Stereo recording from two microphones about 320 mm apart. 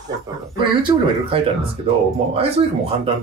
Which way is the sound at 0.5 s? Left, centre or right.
Centre.